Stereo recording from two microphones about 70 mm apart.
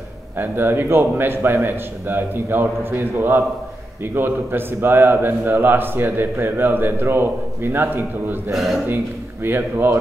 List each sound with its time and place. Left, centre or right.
0.4 s a man's voice: right
8.5 s speech: centre
8.8 s a man's voice: right